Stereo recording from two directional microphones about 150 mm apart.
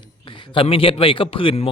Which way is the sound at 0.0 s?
35° left (ahead or behind).